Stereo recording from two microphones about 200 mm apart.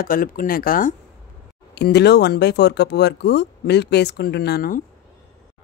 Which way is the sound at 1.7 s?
55° left (ahead or behind).